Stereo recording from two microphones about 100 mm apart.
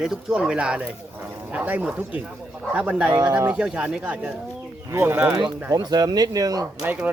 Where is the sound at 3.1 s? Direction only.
35° right (ahead or behind).